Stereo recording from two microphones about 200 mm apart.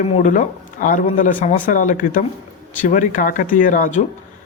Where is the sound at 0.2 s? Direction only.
40° left (ahead or behind).